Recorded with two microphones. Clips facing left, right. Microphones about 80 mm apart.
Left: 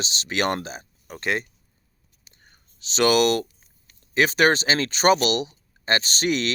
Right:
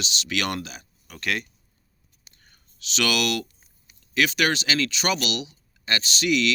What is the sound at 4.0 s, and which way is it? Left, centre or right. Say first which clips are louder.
Speech: left 4 dB; left.